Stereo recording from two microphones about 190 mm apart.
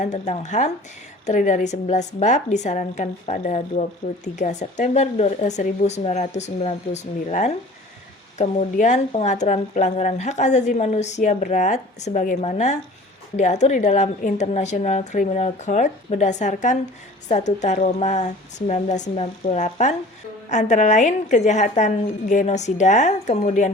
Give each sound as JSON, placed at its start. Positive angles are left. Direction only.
{"t": 0.0, "sound": "a woman's voice", "side_deg": 40}